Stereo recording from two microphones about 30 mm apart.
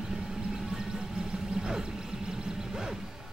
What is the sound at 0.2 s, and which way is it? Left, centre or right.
Music, right.